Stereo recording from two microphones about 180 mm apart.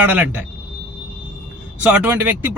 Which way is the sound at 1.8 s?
10° right (ahead or behind).